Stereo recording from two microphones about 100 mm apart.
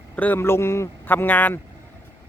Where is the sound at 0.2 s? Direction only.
20° left (ahead or behind).